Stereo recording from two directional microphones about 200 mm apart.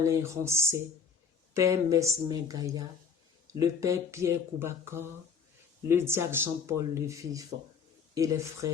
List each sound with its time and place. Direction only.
0.0 s speech: 15° right (ahead or behind)